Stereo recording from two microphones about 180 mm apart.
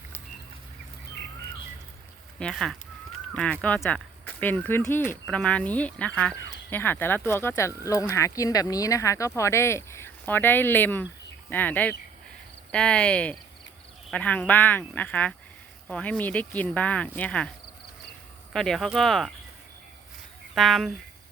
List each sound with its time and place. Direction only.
2.4 s speech: 5° left (ahead or behind)
18.5 s speech: centre (ahead or behind)
20.6 s speech: centre (ahead or behind)